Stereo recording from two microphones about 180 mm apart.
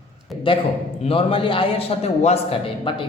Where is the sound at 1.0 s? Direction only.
30° left (ahead or behind).